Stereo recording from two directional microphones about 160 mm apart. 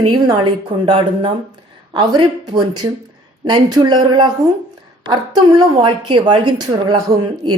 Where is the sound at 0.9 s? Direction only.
35° right (ahead or behind).